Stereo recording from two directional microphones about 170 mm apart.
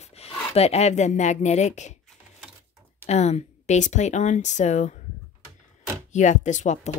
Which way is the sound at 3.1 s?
40° left (ahead or behind).